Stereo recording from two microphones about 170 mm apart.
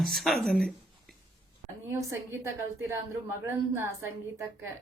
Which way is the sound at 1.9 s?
15° right (ahead or behind).